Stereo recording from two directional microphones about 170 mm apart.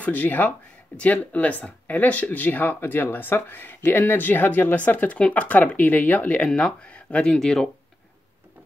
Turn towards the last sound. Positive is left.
turn(degrees=5)  # may be behind; listen again after turning